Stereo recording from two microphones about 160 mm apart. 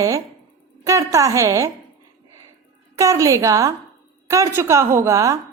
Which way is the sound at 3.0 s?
20° right (ahead or behind).